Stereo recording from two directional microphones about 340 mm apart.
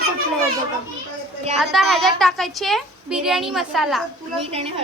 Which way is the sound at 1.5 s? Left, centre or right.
Centre.